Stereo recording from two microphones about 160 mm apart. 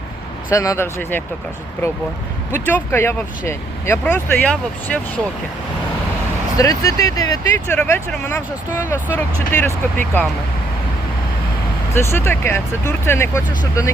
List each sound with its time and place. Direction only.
0.5 s speech: 20° left (ahead or behind)
2.5 s speech: 15° left (ahead or behind)
6.6 s speech: 20° left (ahead or behind)
11.9 s speech: 15° left (ahead or behind)